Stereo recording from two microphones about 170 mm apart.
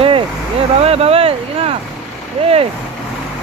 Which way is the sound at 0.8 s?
35° right (ahead or behind).